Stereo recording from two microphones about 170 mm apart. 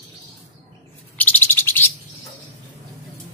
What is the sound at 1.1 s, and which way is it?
Bird, 10° left (ahead or behind).